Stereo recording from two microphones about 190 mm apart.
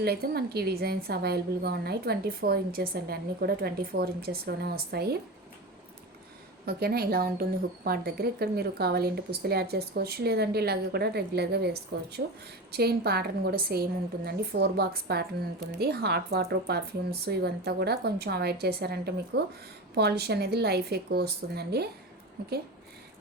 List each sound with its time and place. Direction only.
0.0 s a woman's voice: 55° right (ahead or behind)
6.7 s a woman's voice: 55° right (ahead or behind)